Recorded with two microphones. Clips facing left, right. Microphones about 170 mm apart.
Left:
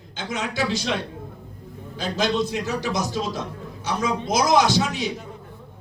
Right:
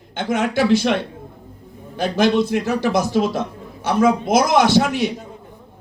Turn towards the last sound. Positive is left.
turn(degrees=-60)  # may be behind; listen again after turning